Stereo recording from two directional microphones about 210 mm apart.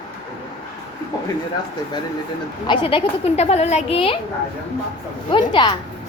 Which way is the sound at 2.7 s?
25° left (ahead or behind).